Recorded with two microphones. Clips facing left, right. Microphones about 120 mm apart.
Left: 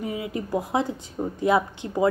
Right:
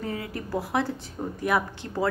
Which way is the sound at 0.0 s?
15° left (ahead or behind).